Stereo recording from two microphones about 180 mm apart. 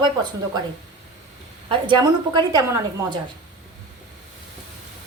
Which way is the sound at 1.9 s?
25° right (ahead or behind).